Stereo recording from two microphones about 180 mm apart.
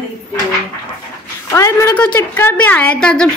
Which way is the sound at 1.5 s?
15° left (ahead or behind).